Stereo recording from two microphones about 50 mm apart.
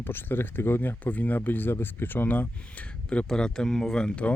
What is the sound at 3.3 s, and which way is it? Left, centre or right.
Speech, centre.